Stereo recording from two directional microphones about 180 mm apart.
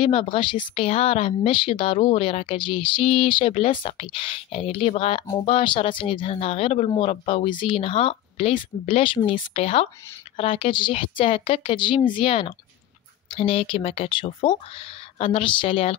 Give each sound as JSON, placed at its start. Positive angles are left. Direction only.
{"t": 0.0, "sound": "speech", "side_deg": 30}